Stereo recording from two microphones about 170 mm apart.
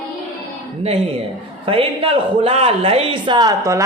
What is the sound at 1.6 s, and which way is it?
A man's voice, 30° right (ahead or behind).